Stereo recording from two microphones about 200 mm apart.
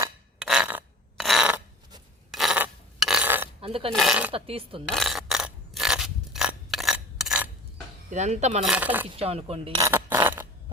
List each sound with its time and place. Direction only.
0.0 s a sound: 5° right (ahead or behind)
3.6 s speech: 30° right (ahead or behind)
3.9 s speech: centre (ahead or behind)
4.3 s speech: 30° right (ahead or behind)
4.9 s mechanisms: centre (ahead or behind)
8.1 s cutlery: 35° right (ahead or behind)
8.6 s speech: 5° right (ahead or behind)
9.0 s speech: 30° right (ahead or behind)
9.8 s a sound: 10° right (ahead or behind)